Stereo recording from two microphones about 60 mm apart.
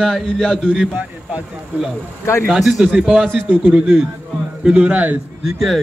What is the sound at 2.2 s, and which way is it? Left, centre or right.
Speech, left.